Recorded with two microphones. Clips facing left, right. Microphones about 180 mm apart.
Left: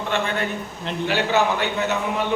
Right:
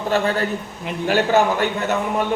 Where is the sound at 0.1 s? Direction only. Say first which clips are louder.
Right 5 dB; 35° right (ahead or behind).